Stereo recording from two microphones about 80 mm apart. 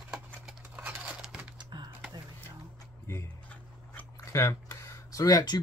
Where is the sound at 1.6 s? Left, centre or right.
Right.